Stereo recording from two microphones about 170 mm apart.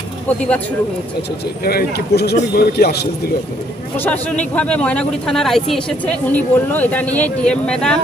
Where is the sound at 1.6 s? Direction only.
65° left (ahead or behind).